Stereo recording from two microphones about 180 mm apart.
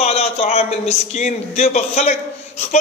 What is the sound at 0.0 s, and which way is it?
Speech, 35° left (ahead or behind).